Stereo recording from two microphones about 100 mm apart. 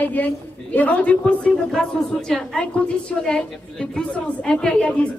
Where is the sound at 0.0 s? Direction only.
15° left (ahead or behind).